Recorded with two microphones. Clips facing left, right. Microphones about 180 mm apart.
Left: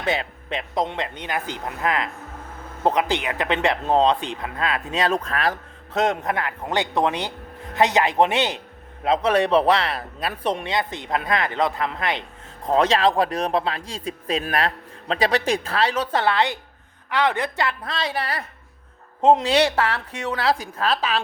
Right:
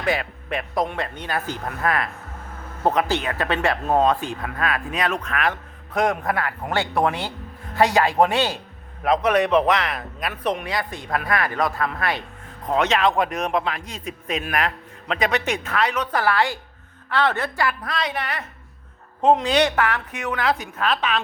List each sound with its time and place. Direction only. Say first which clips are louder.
0.0 s speech: right 1 dB; 25° left (ahead or behind)
12.6 s speech: left 2 dB; 30° left (ahead or behind)